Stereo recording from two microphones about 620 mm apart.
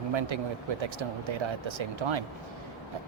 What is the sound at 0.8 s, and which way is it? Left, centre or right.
Speech, right.